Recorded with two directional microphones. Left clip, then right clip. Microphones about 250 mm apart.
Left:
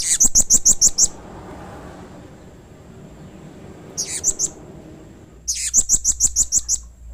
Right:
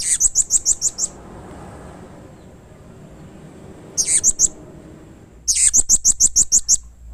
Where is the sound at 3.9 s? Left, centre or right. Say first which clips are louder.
Right 5 dB; right.